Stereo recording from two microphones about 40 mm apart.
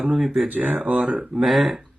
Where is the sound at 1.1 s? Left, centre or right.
Centre.